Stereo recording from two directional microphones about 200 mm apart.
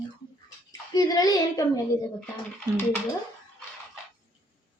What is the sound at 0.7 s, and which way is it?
Speech, 20° left (ahead or behind).